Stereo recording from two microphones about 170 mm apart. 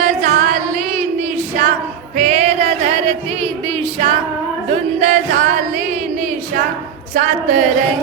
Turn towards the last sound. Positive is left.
turn(degrees=-45)  # may be behind; listen again after turning